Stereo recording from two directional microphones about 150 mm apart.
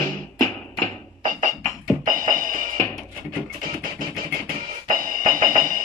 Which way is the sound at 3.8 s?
70° right (ahead or behind).